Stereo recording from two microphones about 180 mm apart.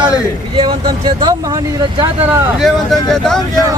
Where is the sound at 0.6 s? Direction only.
25° right (ahead or behind).